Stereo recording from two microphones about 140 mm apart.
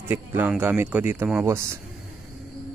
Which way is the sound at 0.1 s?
15° right (ahead or behind).